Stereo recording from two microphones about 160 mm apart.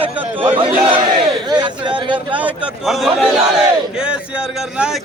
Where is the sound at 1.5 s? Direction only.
30° right (ahead or behind).